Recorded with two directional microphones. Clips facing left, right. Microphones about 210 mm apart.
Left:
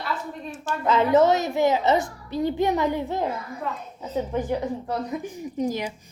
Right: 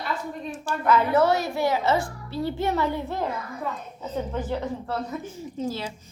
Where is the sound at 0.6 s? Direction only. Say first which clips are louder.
Even; 20° left (ahead or behind).